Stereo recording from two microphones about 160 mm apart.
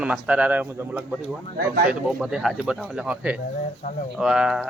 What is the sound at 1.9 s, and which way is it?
Speech, 5° right (ahead or behind).